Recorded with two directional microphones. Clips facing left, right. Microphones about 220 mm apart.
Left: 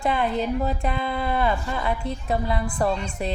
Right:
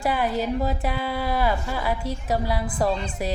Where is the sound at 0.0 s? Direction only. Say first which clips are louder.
Even; 5° right (ahead or behind).